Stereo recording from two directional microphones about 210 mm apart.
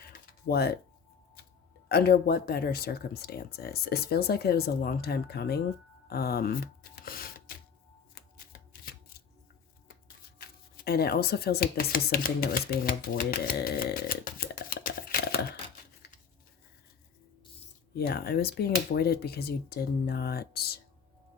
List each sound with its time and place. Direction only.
0.4 s speech: 50° left (ahead or behind)
1.9 s speech: 50° left (ahead or behind)
7.0 s a sound: 45° left (ahead or behind)
8.1 s shuffling cards: 45° left (ahead or behind)
10.8 s speech: 50° left (ahead or behind)
17.9 s speech: 50° left (ahead or behind)